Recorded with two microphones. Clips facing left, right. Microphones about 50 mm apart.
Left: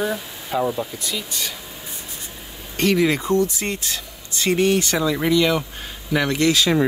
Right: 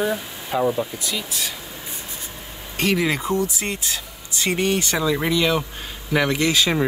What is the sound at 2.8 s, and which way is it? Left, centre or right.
Speech, centre.